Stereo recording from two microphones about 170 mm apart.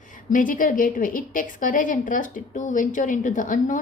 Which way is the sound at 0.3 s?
50° left (ahead or behind).